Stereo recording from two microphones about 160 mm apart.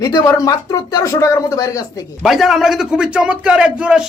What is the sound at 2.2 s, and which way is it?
A man's voice, centre (ahead or behind).